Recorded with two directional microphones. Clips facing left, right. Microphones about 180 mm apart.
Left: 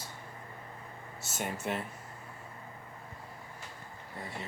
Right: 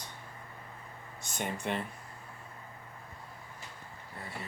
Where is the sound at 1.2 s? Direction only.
5° left (ahead or behind).